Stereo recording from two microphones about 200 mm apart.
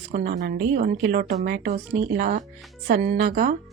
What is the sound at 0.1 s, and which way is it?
Speech, 45° right (ahead or behind).